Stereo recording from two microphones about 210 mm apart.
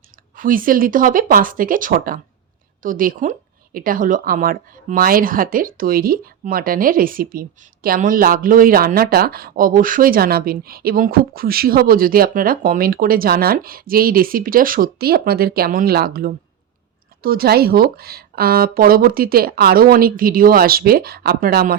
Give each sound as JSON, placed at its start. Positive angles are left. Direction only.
{"t": 0.3, "sound": "a woman's voice", "side_deg": -40}